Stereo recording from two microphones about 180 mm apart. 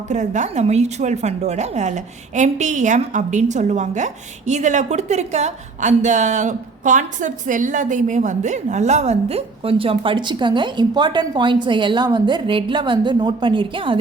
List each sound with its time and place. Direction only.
0.1 s a woman's voice: 40° right (ahead or behind)